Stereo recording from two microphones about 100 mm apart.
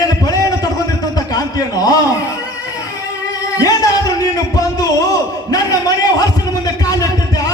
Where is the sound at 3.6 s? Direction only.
40° left (ahead or behind).